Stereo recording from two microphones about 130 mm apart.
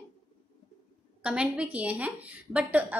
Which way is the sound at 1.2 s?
10° right (ahead or behind).